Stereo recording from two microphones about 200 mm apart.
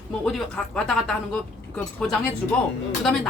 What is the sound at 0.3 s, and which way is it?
A woman's voice, 5° left (ahead or behind).